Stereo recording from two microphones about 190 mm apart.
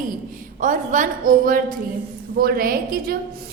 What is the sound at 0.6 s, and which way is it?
A woman's voice, 45° right (ahead or behind).